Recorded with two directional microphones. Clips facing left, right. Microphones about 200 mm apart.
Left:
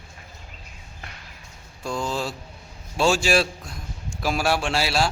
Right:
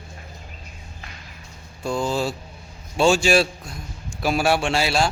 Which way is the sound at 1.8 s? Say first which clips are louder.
Right 4 dB; centre (ahead or behind).